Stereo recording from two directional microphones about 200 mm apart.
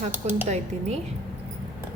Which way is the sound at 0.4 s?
35° right (ahead or behind).